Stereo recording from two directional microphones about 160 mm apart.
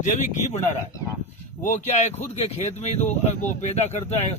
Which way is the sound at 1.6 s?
45° left (ahead or behind).